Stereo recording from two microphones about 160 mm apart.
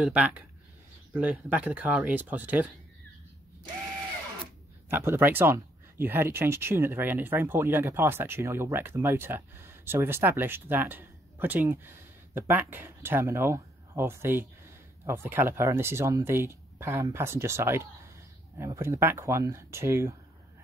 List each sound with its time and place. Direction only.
0.0 s speech: 5° right (ahead or behind)
4.8 s speech: 15° right (ahead or behind)